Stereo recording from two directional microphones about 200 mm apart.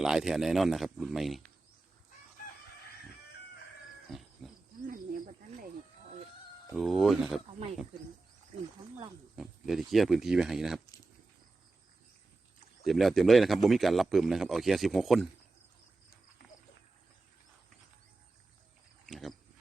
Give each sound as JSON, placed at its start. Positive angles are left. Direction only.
{"t": 0.0, "sound": "speech", "side_deg": -5}
{"t": 4.9, "sound": "snake", "side_deg": -45}
{"t": 6.7, "sound": "speech", "side_deg": 0}
{"t": 9.3, "sound": "speech", "side_deg": 0}
{"t": 12.8, "sound": "speech", "side_deg": 0}
{"t": 19.0, "sound": "wild animals", "side_deg": 0}